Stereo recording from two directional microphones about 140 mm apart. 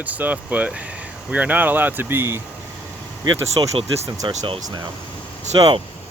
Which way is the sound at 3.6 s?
30° right (ahead or behind).